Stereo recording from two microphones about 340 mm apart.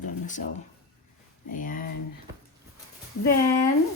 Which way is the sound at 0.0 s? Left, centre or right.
Left.